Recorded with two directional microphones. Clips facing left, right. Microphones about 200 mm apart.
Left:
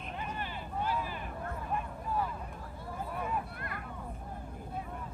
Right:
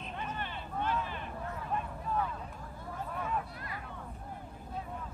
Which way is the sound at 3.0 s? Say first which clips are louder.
Even; 10° left (ahead or behind).